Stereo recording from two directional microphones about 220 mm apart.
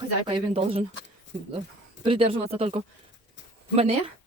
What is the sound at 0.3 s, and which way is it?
Speech, 25° right (ahead or behind).